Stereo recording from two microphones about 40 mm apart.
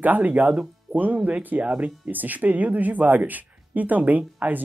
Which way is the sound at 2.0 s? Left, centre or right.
Right.